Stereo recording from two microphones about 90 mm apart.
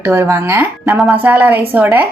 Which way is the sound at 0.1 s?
25° right (ahead or behind).